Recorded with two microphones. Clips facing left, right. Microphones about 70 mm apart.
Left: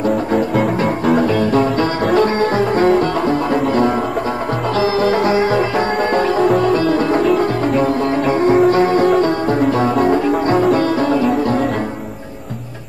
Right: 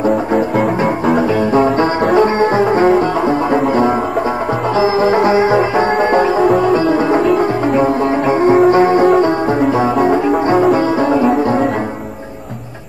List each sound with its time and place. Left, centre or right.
0.6 s music: centre
1.2 s music: centre
6.4 s music: centre
6.7 s music: centre
11.0 s music: right